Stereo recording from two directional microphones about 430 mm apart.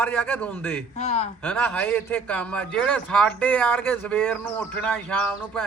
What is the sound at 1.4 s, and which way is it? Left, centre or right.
A man's voice, centre.